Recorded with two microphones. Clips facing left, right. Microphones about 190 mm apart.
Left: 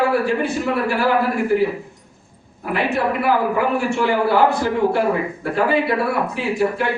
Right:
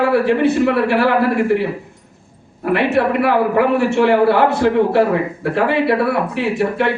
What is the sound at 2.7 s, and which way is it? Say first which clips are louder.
A man's voice: right 5 dB; 65° right (ahead or behind).